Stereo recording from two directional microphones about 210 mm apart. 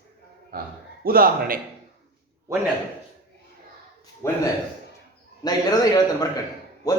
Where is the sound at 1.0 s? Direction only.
45° right (ahead or behind).